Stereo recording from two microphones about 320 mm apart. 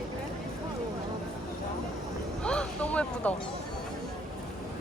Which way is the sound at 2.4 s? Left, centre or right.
Centre.